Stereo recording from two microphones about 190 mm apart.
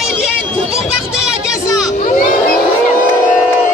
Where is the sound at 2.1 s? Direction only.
45° left (ahead or behind).